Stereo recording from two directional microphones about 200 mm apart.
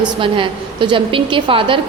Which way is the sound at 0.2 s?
25° right (ahead or behind).